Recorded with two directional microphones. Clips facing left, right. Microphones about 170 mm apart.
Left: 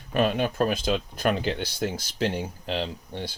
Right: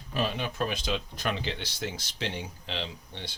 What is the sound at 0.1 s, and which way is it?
Speech, 55° left (ahead or behind).